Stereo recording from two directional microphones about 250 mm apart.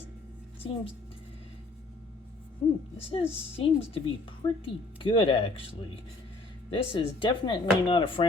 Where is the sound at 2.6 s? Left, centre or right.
Left.